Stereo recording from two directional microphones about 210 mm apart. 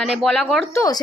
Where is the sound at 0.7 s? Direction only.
15° left (ahead or behind).